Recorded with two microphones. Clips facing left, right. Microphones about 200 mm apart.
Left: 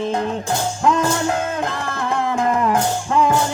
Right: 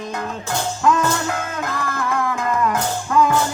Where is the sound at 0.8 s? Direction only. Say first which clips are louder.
Left 1 dB; 30° left (ahead or behind).